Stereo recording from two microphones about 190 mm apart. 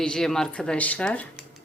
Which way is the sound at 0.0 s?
5° left (ahead or behind).